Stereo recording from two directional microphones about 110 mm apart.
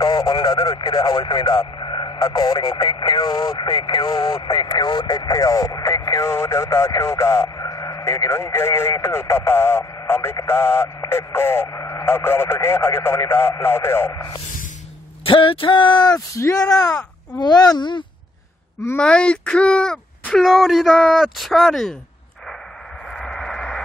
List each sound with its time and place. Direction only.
0.0 s speech: 40° left (ahead or behind)
12.0 s speech: 20° left (ahead or behind)
15.2 s speech: 50° left (ahead or behind)
18.9 s speech: 10° left (ahead or behind)
23.1 s a sound: 5° left (ahead or behind)